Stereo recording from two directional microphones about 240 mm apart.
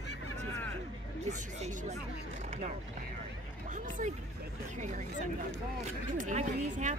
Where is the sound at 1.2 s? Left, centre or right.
Right.